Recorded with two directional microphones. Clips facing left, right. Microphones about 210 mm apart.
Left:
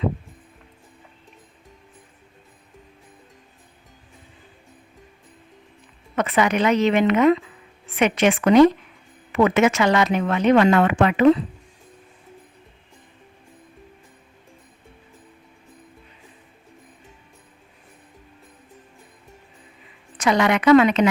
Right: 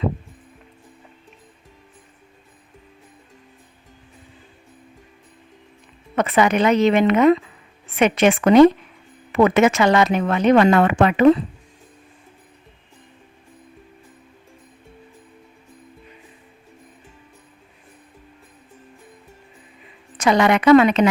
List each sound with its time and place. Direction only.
6.1 s speech: 30° right (ahead or behind)
20.2 s speech: 30° right (ahead or behind)